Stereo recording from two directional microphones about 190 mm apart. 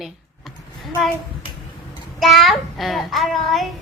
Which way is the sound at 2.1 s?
Centre (ahead or behind).